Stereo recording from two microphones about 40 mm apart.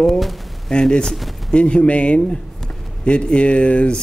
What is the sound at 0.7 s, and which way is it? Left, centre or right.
A man's voice, centre.